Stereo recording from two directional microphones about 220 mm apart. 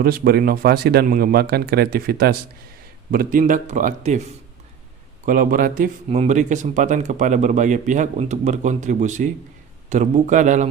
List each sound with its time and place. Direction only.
0.0 s speech: 45° right (ahead or behind)